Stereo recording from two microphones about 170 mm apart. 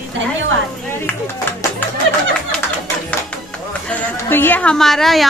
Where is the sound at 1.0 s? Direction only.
15° left (ahead or behind).